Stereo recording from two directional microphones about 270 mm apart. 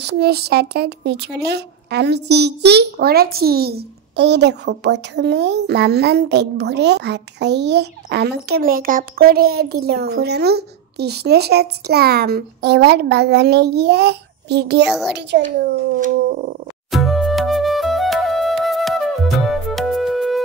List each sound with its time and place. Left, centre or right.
0.0 s speech: right
14.9 s a child's voice: centre
16.9 s music: centre